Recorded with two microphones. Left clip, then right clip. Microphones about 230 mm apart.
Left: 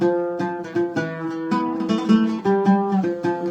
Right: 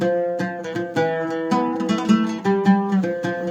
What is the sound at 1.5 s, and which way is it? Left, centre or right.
Music, right.